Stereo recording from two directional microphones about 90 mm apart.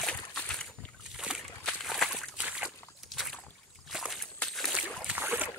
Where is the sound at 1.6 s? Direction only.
5° left (ahead or behind).